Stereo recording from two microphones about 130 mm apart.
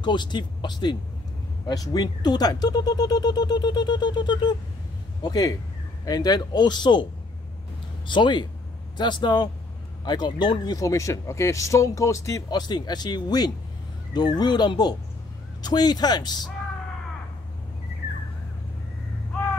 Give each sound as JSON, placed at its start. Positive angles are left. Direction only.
{"t": 0.0, "sound": "speech", "side_deg": 35}
{"t": 8.1, "sound": "speech", "side_deg": 35}